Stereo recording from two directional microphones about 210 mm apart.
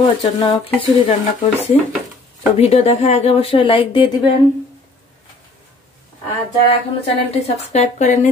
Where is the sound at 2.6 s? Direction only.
30° left (ahead or behind).